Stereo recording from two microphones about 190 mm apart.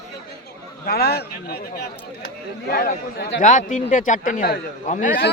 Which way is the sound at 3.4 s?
40° left (ahead or behind).